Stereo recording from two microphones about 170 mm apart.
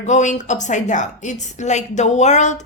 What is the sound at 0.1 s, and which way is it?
A woman's voice, 45° left (ahead or behind).